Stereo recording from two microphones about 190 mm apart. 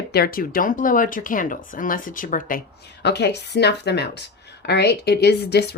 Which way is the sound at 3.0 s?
65° left (ahead or behind).